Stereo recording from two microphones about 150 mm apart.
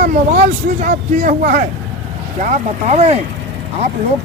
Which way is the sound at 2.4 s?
50° right (ahead or behind).